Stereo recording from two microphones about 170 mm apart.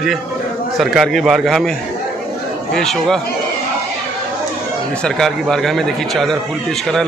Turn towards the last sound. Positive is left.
turn(degrees=0)  # may be behind; listen again after turning